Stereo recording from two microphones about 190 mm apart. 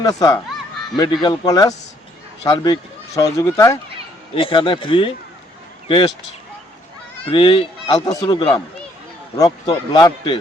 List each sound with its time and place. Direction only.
0.0 s a man's voice: 20° left (ahead or behind)
4.4 s a man's voice: 25° left (ahead or behind)
7.3 s a man's voice: 25° left (ahead or behind)